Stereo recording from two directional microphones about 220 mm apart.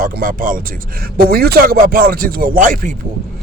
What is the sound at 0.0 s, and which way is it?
Speech, 40° right (ahead or behind).